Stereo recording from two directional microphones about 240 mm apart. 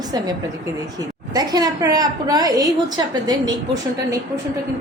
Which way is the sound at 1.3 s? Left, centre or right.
Centre.